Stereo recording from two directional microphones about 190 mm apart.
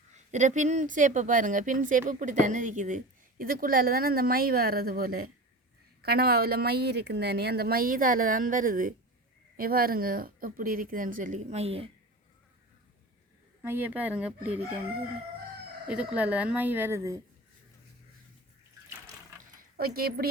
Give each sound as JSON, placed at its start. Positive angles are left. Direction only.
{"t": 0.3, "sound": "speech", "side_deg": -40}
{"t": 13.6, "sound": "speech", "side_deg": -10}
{"t": 15.9, "sound": "speech", "side_deg": -5}
{"t": 19.4, "sound": "a sound", "side_deg": -50}